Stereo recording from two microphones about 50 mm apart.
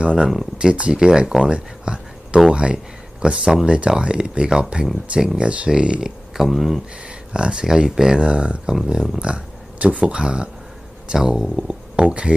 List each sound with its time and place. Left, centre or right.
0.0 s speech: centre
1.5 s a sound: centre
2.5 s speech: centre
7.3 s speech: centre